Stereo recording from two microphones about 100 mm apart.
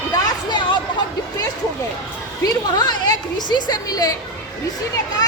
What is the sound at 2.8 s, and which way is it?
A woman's voice, 45° left (ahead or behind).